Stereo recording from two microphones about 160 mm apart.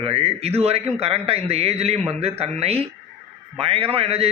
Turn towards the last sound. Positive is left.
turn(degrees=-40)  # may be behind; listen again after turning